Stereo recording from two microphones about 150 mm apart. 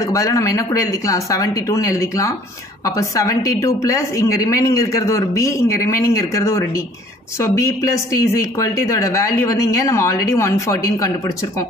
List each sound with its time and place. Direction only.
0.0 s a woman's voice: 20° left (ahead or behind)